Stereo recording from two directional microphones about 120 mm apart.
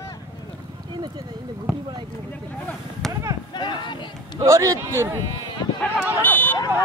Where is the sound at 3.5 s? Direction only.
40° left (ahead or behind).